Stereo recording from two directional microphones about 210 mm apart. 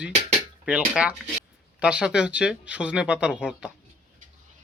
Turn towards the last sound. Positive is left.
turn(degrees=-5)  # may be behind; listen again after turning